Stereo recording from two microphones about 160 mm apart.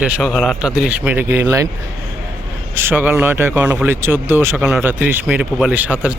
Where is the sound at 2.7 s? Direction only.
10° right (ahead or behind).